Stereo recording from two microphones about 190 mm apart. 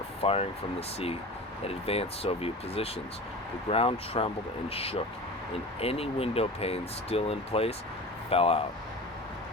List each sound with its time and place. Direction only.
0.2 s speech: 30° left (ahead or behind)